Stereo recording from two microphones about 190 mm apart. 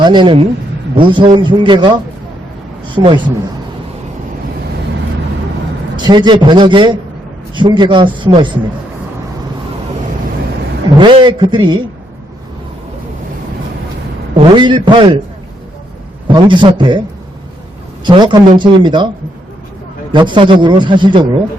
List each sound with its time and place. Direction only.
0.0 s a man's voice: 25° right (ahead or behind)
6.0 s a man's voice: 25° right (ahead or behind)
10.9 s a man's voice: 25° right (ahead or behind)
14.3 s a man's voice: 25° right (ahead or behind)
16.2 s a man's voice: 25° right (ahead or behind)
18.0 s a man's voice: 25° right (ahead or behind)
20.1 s a man's voice: 25° right (ahead or behind)